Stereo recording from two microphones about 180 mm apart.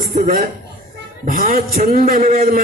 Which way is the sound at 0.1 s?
45° right (ahead or behind).